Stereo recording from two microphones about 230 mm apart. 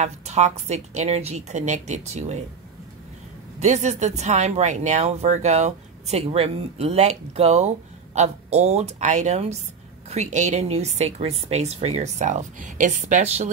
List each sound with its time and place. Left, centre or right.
0.0 s speech: right
3.5 s speech: right